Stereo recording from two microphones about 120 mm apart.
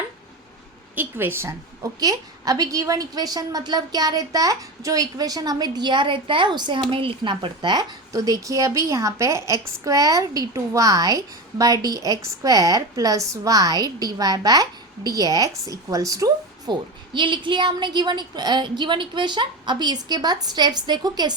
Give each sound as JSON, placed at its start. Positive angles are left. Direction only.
{"t": 0.9, "sound": "a woman's voice", "side_deg": -15}